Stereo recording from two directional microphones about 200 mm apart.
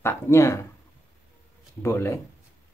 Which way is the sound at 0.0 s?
15° left (ahead or behind).